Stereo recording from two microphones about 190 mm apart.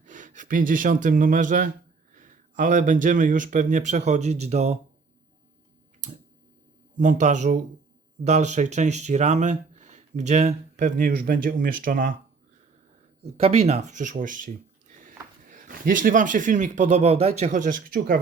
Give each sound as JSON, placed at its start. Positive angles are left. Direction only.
{"t": 0.0, "sound": "speech", "side_deg": -40}
{"t": 6.9, "sound": "speech", "side_deg": -40}
{"t": 13.3, "sound": "speech", "side_deg": -35}